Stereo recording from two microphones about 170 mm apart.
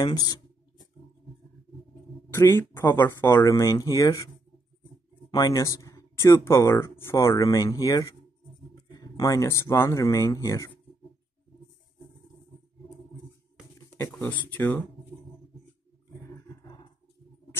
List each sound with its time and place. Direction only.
0.0 s speech: 20° left (ahead or behind)
2.3 s speech: 15° left (ahead or behind)
5.3 s speech: 20° left (ahead or behind)
13.8 s speech: 15° left (ahead or behind)
16.3 s roar: 25° left (ahead or behind)